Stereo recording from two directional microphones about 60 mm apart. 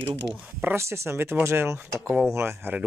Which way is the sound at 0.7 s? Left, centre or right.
Right.